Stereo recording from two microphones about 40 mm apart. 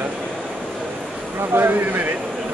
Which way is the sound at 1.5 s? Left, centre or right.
Right.